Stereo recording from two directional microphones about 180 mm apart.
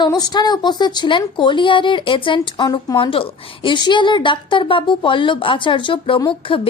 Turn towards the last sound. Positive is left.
turn(degrees=30)  # may be behind; listen again after turning